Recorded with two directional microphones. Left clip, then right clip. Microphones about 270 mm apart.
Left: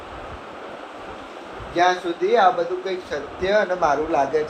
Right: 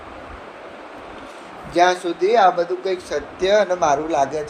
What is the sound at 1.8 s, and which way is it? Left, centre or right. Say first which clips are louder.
Speech: right 3 dB; right.